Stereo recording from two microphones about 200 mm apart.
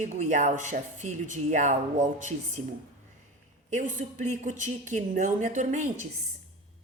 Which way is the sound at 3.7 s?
35° right (ahead or behind).